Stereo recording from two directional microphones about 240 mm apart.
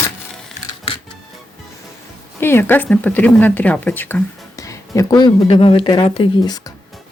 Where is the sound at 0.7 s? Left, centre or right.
Left.